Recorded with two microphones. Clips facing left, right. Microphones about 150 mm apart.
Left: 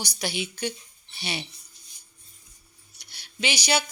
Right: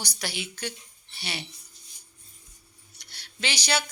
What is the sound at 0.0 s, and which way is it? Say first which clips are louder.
A woman's voice: left 4 dB; 15° left (ahead or behind).